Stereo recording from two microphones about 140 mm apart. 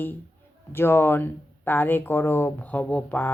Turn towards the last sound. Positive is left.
turn(degrees=10)  # may be behind; listen again after turning